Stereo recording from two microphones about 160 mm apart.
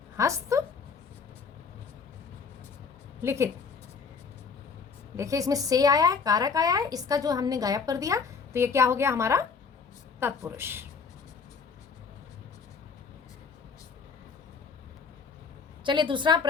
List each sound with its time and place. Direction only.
0.2 s a woman's voice: 20° right (ahead or behind)
3.2 s a woman's voice: 15° right (ahead or behind)
5.1 s a woman's voice: 20° right (ahead or behind)
15.8 s a woman's voice: 30° right (ahead or behind)